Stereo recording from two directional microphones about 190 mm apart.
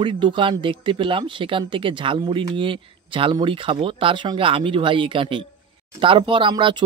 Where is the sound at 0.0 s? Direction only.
25° right (ahead or behind).